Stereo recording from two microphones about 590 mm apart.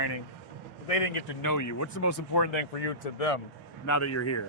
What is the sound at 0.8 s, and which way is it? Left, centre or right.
Speech, left.